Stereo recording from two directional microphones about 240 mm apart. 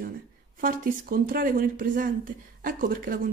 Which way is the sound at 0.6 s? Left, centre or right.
Right.